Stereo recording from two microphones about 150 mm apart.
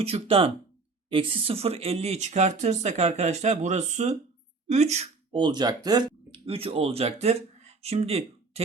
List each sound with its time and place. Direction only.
0.0 s speech: 40° right (ahead or behind)
5.3 s speech: 30° right (ahead or behind)
6.4 s speech: 40° right (ahead or behind)